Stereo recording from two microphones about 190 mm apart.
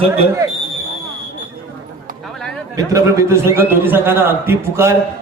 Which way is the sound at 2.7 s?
15° right (ahead or behind).